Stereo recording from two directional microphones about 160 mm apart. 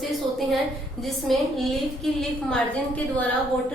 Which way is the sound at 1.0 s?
Centre (ahead or behind).